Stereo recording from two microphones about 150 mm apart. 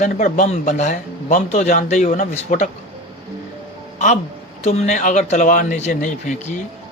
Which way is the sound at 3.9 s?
50° left (ahead or behind).